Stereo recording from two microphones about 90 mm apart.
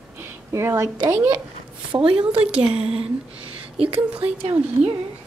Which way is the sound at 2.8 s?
90° right.